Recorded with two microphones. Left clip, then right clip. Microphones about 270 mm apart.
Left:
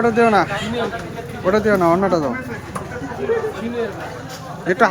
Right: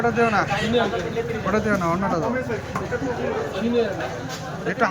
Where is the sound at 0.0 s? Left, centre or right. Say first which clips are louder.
Left 5 dB; left.